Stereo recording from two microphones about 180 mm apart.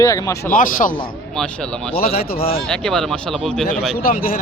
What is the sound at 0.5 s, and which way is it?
Speech, 50° left (ahead or behind).